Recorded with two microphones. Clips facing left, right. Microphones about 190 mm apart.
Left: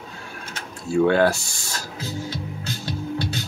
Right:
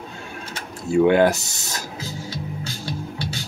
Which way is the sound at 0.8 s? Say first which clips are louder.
Right 2 dB; 20° right (ahead or behind).